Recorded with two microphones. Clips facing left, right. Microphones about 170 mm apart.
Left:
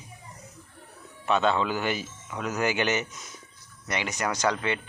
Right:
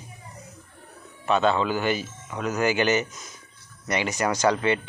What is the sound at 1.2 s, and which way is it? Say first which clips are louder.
A man's voice: right 2 dB; centre (ahead or behind).